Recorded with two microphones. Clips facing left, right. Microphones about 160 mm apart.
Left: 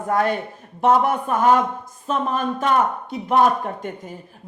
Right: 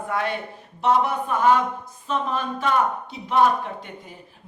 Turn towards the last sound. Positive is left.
turn(degrees=45)  # may be behind; listen again after turning